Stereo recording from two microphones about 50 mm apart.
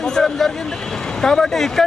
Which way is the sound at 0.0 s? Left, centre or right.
Centre.